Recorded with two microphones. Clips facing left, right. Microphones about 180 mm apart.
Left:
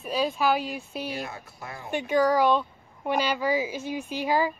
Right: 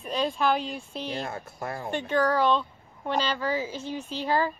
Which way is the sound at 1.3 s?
50° right (ahead or behind).